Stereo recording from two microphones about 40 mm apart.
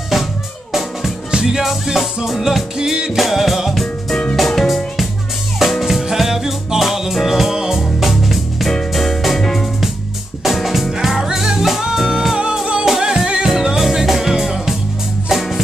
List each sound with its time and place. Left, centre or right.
1.3 s music: centre
2.8 s music: centre
3.2 s music: centre
3.7 s music: centre
10.4 s music: centre